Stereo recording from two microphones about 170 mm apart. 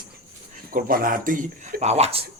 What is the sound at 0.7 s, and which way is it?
Speech, 55° right (ahead or behind).